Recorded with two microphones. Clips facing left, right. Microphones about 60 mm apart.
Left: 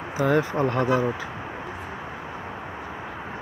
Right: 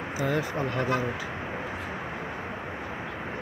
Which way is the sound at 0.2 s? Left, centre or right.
Left.